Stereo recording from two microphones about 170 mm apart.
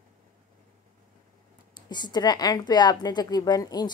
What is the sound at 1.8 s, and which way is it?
A woman's voice, 25° left (ahead or behind).